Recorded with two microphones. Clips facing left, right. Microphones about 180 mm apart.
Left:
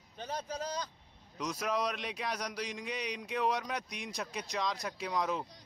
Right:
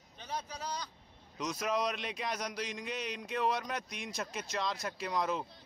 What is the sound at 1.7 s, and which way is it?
Speech, 10° left (ahead or behind).